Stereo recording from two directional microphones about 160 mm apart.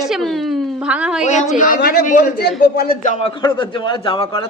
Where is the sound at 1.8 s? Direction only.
90° left.